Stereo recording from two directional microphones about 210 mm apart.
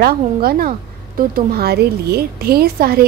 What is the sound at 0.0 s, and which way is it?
A woman's voice, 45° right (ahead or behind).